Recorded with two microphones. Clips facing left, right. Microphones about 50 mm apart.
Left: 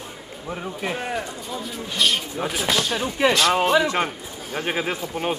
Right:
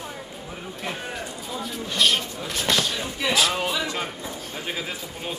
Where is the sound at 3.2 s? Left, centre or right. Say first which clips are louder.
Left 5 dB; left.